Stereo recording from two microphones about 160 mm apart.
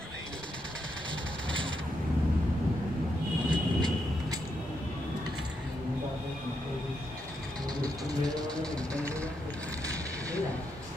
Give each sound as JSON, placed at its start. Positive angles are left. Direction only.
{"t": 3.4, "sound": "vehicle", "side_deg": -25}
{"t": 7.8, "sound": "music", "side_deg": -25}